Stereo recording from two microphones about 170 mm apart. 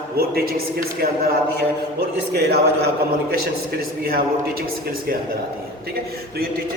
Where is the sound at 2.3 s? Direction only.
75° right (ahead or behind).